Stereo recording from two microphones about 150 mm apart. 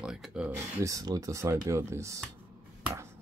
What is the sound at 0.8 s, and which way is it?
Speech, 25° right (ahead or behind).